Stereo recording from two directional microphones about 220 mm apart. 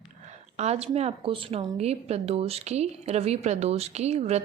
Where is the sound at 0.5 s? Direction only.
30° right (ahead or behind).